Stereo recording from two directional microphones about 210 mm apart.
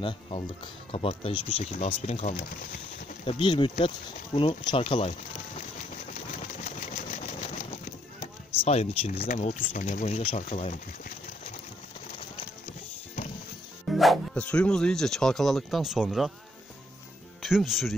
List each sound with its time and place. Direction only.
0.0 s speech: 25° left (ahead or behind)
6.4 s vehicle: 35° left (ahead or behind)
8.6 s speech: 30° left (ahead or behind)
13.8 s speech: centre (ahead or behind)
17.4 s speech: centre (ahead or behind)